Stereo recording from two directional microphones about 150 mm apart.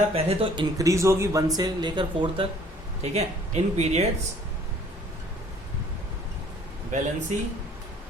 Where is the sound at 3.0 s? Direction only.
45° right (ahead or behind).